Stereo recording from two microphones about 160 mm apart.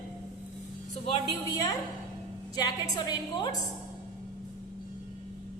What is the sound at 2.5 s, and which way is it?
Speech, 25° left (ahead or behind).